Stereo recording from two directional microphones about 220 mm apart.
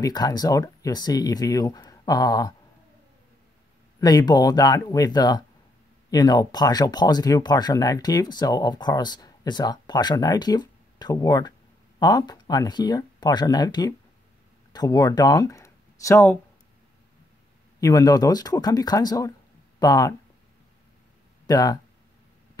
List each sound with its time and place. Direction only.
0.0 s speech: 20° left (ahead or behind)
4.0 s speech: 20° left (ahead or behind)
17.7 s speech: 15° left (ahead or behind)
21.5 s speech: 15° left (ahead or behind)